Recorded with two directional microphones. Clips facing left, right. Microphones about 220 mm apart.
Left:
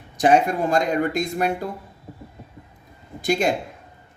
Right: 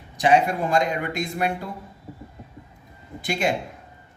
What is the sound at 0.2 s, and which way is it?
Speech, 45° left (ahead or behind).